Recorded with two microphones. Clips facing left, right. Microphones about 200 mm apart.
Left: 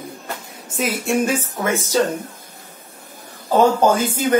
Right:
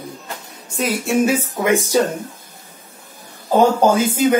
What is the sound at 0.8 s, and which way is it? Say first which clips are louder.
Speech: right 2 dB; centre (ahead or behind).